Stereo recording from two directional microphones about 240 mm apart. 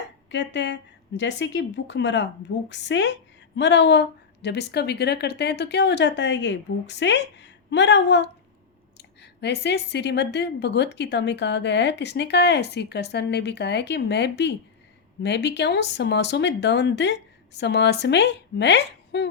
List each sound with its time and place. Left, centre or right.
0.3 s a woman's voice: left